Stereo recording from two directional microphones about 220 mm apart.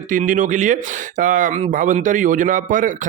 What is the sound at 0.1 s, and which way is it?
A man's voice, 35° right (ahead or behind).